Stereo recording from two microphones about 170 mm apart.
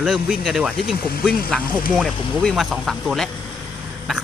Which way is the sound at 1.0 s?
60° left (ahead or behind).